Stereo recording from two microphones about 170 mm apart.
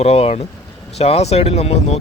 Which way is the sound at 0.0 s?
35° left (ahead or behind).